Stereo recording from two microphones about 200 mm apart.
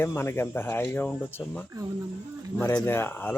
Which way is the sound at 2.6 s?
10° left (ahead or behind).